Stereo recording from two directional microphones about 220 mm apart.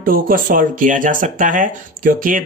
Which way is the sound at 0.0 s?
40° right (ahead or behind).